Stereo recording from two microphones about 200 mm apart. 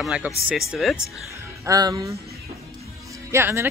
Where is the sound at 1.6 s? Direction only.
20° right (ahead or behind).